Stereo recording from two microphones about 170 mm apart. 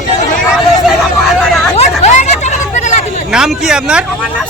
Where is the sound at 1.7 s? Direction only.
40° left (ahead or behind).